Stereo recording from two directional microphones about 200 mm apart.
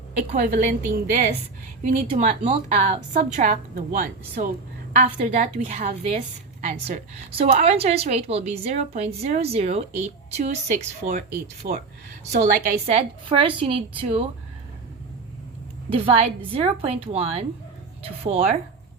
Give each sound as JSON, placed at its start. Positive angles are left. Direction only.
{"t": 0.2, "sound": "a woman's voice", "side_deg": -45}
{"t": 1.8, "sound": "a woman's voice", "side_deg": -35}
{"t": 7.3, "sound": "a woman's voice", "side_deg": -25}
{"t": 15.9, "sound": "a woman's voice", "side_deg": -30}